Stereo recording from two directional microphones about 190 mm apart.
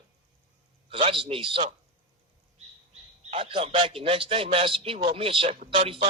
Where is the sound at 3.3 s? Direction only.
30° right (ahead or behind).